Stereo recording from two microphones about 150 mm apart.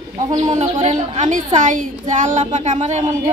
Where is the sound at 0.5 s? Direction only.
50° right (ahead or behind).